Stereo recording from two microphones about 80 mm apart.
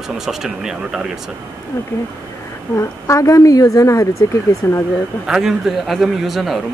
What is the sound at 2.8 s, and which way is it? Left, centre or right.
A woman's voice, left.